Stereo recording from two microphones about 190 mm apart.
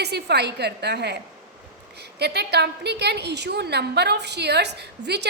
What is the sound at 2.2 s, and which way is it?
A woman's voice, 60° right (ahead or behind).